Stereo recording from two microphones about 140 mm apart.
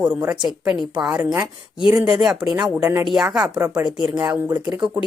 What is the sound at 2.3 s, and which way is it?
Speech, 5° right (ahead or behind).